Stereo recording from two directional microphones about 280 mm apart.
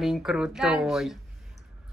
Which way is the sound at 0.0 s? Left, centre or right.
Centre.